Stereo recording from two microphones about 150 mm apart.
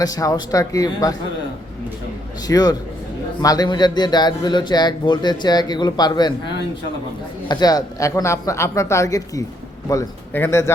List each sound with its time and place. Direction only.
0.0 s a man's voice: 25° left (ahead or behind)
2.5 s a man's voice: 25° left (ahead or behind)
7.4 s a man's voice: 25° left (ahead or behind)